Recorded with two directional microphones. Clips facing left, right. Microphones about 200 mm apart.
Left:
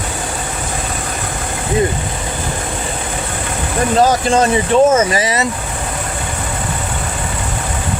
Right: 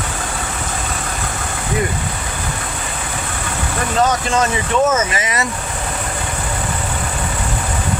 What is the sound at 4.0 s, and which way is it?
Speech, 30° left (ahead or behind).